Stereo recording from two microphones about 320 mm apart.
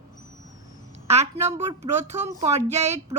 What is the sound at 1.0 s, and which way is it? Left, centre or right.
A woman's voice, centre.